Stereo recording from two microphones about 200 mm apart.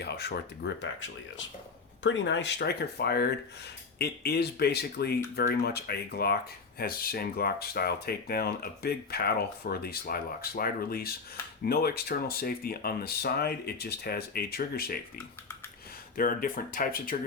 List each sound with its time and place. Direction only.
0.0 s speech: 55° left (ahead or behind)
16.1 s speech: 45° left (ahead or behind)